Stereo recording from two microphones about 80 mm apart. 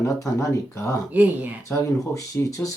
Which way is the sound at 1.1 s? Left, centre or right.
Right.